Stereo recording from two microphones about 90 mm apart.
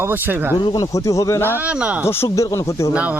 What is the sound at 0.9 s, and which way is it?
Speech, 35° left (ahead or behind).